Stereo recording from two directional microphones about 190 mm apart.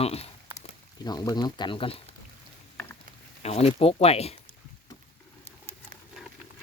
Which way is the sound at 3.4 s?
35° left (ahead or behind).